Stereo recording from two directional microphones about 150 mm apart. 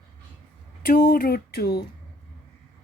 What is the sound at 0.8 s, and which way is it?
Speech, 75° left (ahead or behind).